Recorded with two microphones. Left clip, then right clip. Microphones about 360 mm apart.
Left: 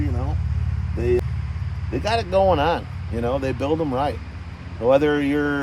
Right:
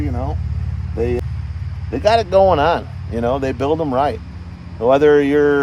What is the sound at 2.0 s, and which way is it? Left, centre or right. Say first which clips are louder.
Speech: right 7 dB; right.